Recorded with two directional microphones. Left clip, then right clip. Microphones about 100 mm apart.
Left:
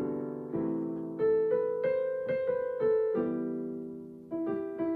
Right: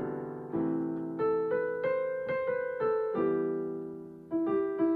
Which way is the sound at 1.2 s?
30° right (ahead or behind).